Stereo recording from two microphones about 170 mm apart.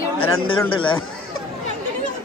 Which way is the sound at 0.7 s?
30° left (ahead or behind).